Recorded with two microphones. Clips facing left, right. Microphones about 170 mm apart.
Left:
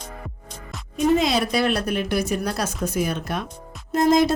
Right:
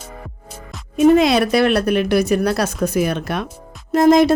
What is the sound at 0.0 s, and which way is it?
Music, 5° right (ahead or behind).